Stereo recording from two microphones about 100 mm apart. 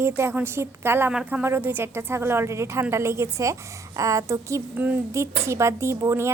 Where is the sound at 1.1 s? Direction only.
10° right (ahead or behind).